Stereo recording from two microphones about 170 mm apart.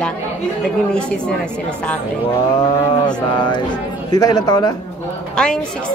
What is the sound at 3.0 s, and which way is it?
Mantra, 25° left (ahead or behind).